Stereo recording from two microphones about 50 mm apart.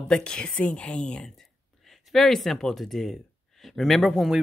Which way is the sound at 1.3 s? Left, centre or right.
Centre.